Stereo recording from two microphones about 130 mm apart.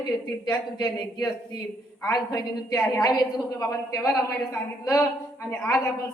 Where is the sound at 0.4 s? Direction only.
30° left (ahead or behind).